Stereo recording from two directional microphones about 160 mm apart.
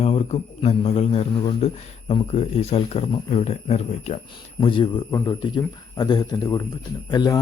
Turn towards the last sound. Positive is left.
turn(degrees=25)  # may be behind; listen again after turning